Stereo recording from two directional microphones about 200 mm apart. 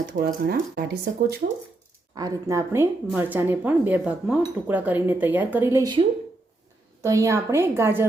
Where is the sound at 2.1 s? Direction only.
15° right (ahead or behind).